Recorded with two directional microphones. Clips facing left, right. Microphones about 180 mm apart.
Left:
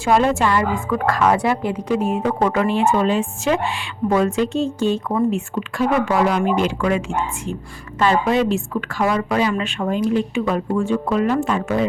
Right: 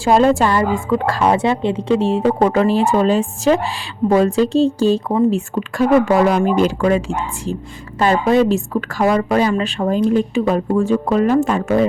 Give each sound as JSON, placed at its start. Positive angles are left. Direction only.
{"t": 0.0, "sound": "a woman's voice", "side_deg": -35}